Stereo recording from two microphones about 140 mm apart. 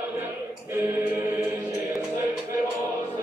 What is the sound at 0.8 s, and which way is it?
Music, 15° right (ahead or behind).